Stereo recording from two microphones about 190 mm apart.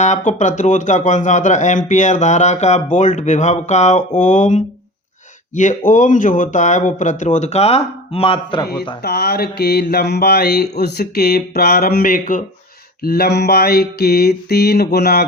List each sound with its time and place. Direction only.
0.0 s speech: 40° left (ahead or behind)
9.0 s mantra: 60° left (ahead or behind)